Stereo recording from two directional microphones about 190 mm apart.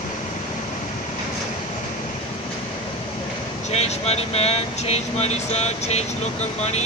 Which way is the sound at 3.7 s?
35° left (ahead or behind).